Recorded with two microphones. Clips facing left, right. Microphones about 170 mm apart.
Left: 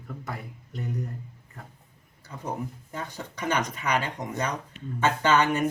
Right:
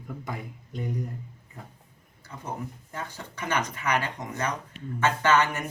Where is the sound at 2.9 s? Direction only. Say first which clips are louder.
Left 2 dB; 20° left (ahead or behind).